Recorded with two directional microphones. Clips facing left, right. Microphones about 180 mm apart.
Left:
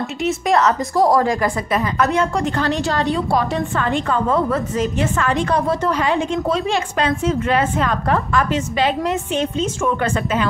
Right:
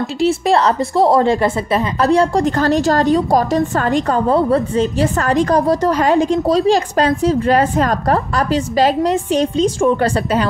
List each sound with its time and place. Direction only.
0.2 s a woman's voice: 30° right (ahead or behind)